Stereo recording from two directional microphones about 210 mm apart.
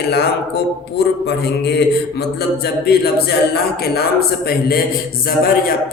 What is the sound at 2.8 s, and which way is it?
A man's voice, 50° left (ahead or behind).